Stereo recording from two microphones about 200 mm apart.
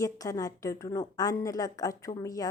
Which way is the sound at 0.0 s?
15° left (ahead or behind).